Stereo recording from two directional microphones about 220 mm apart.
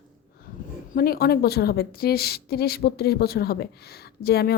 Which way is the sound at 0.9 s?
45° left (ahead or behind).